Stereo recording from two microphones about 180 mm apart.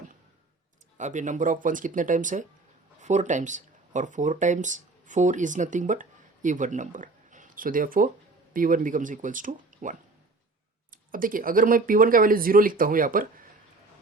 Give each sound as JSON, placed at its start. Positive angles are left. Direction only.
{"t": 0.9, "sound": "speech", "side_deg": -45}